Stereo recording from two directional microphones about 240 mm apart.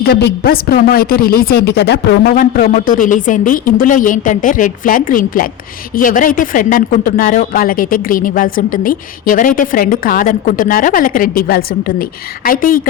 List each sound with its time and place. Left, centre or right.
0.1 s speech: left